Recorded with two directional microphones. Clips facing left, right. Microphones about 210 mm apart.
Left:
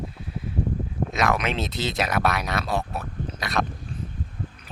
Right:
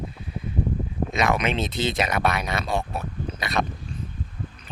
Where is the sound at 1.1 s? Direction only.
Centre (ahead or behind).